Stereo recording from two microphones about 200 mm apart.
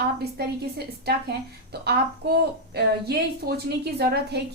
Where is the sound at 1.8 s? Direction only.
55° right (ahead or behind).